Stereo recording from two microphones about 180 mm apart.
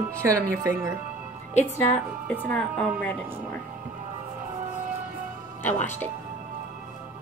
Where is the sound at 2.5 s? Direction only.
5° left (ahead or behind).